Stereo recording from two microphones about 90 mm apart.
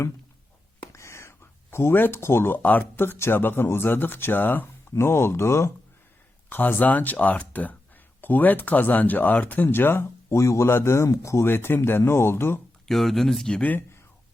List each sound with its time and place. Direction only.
0.9 s speech: 30° left (ahead or behind)
12.9 s speech: centre (ahead or behind)